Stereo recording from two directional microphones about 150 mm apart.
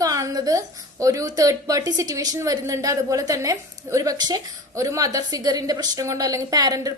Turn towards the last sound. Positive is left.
turn(degrees=-25)  # may be behind; listen again after turning